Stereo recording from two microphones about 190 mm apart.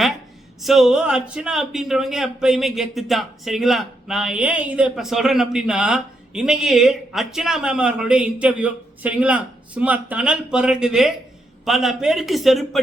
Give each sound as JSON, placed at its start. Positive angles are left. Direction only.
{"t": 0.6, "sound": "a man's voice", "side_deg": 0}